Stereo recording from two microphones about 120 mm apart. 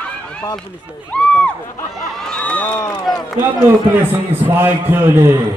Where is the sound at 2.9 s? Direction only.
35° left (ahead or behind).